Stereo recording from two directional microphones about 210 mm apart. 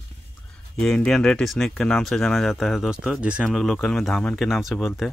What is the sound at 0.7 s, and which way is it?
Speech, 5° left (ahead or behind).